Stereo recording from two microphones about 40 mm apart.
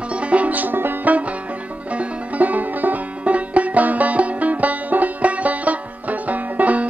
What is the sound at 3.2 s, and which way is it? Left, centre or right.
Music, right.